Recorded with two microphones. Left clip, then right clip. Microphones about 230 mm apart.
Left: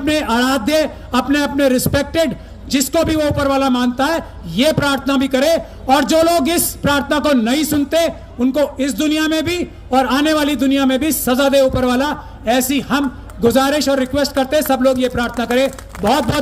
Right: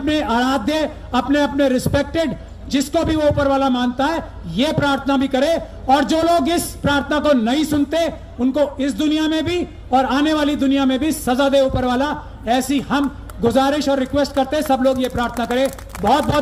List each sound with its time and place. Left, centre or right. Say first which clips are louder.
0.0 s a man's voice: left 2 dB; left